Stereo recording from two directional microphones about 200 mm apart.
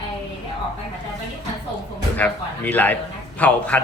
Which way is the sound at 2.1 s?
10° left (ahead or behind).